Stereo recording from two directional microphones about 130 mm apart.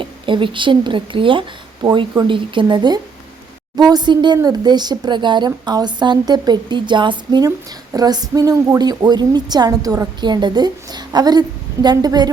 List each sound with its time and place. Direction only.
0.0 s a woman's voice: 40° right (ahead or behind)